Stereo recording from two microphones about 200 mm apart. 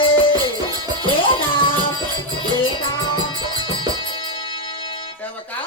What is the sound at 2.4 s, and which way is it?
Music, 25° left (ahead or behind).